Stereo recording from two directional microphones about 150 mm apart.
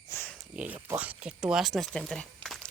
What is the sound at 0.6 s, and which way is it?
Speech, 10° right (ahead or behind).